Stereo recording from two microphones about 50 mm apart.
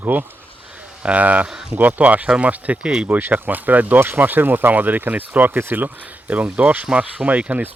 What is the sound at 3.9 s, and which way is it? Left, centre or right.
Speech, right.